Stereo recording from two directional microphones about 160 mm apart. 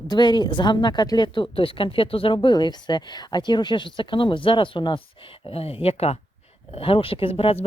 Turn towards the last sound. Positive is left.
turn(degrees=35)  # may be behind; listen again after turning